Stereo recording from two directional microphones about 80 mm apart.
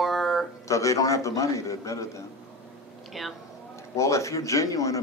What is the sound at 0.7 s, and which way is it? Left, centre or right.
A man's voice, left.